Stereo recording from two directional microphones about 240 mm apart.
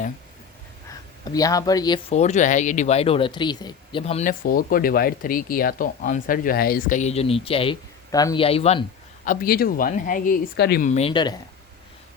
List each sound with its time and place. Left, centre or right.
0.9 s speech: centre
9.2 s speech: left; by 11.3 s centre